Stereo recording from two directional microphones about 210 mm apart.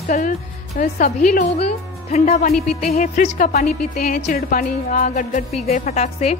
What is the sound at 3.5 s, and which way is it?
A woman's voice, 45° left (ahead or behind).